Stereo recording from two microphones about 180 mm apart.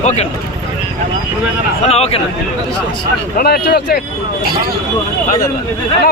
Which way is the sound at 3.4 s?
60° left (ahead or behind).